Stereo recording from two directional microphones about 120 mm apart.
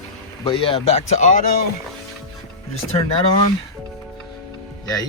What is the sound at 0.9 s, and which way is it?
Speech, 90° left.